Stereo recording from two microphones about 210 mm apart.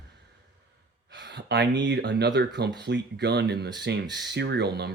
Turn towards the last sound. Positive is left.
turn(degrees=-50)  # may be behind; listen again after turning